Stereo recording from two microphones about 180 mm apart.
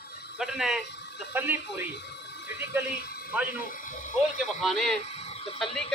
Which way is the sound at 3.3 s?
10° right (ahead or behind).